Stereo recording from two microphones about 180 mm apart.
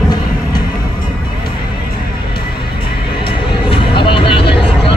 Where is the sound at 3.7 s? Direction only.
30° left (ahead or behind).